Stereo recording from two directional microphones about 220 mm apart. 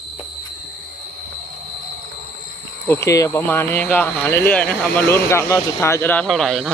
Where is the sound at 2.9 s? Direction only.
15° left (ahead or behind).